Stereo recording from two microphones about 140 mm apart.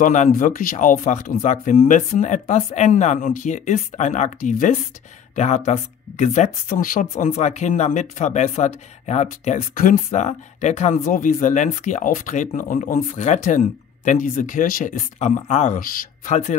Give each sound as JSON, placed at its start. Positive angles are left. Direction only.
{"t": 0.0, "sound": "speech", "side_deg": 65}
{"t": 5.3, "sound": "speech", "side_deg": 55}
{"t": 11.1, "sound": "speech", "side_deg": 75}
{"t": 15.8, "sound": "speech", "side_deg": 75}